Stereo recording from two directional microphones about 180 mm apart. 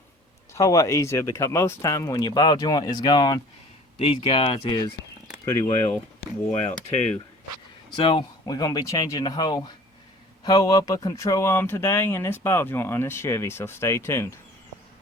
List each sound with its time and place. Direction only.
0.5 s speech: 15° left (ahead or behind)
6.1 s speech: 40° left (ahead or behind)
7.9 s speech: 30° left (ahead or behind)